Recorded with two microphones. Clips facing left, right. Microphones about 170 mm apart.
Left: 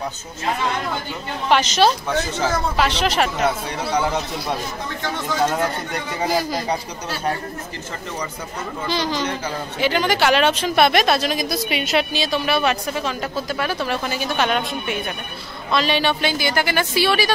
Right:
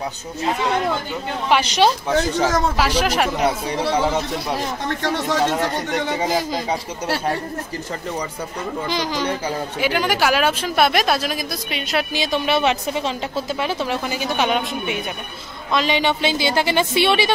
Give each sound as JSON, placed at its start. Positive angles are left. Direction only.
{"t": 1.5, "sound": "a woman's voice", "side_deg": -15}
{"t": 4.6, "sound": "speech", "side_deg": -75}
{"t": 6.1, "sound": "a woman's voice", "side_deg": -20}
{"t": 8.8, "sound": "a woman's voice", "side_deg": -15}
{"t": 12.1, "sound": "a woman's voice", "side_deg": -20}